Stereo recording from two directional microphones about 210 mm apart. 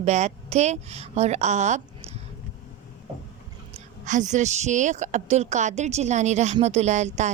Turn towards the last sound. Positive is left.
turn(degrees=-35)  # may be behind; listen again after turning